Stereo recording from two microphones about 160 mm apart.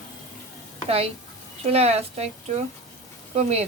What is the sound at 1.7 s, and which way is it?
Speech, 40° right (ahead or behind).